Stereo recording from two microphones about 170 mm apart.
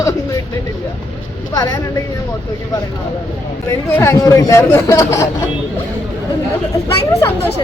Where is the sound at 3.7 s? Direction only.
15° left (ahead or behind).